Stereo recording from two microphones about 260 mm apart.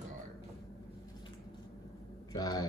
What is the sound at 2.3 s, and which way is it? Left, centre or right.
Speech, centre.